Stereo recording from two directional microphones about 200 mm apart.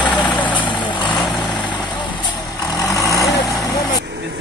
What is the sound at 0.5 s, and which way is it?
Vehicle, 25° left (ahead or behind).